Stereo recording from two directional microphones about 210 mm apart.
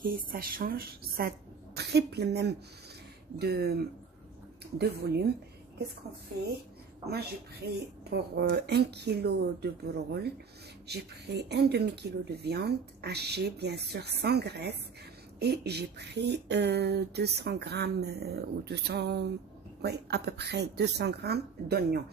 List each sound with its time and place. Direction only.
0.0 s speech: 45° right (ahead or behind)
7.1 s speech: 50° right (ahead or behind)
10.9 s speech: 50° right (ahead or behind)